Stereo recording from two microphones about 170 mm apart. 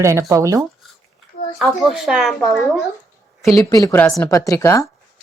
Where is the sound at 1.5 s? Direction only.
Centre (ahead or behind).